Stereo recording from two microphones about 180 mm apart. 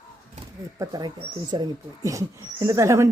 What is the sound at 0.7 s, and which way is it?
Speech, 20° right (ahead or behind).